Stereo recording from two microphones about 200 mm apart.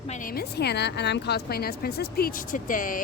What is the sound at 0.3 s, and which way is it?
A woman's voice, 55° left (ahead or behind).